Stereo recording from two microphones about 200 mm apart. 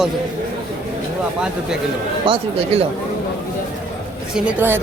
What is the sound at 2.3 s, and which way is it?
Speech, 30° right (ahead or behind).